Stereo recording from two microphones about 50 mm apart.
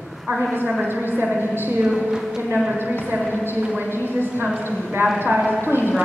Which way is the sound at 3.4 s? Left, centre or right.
Right.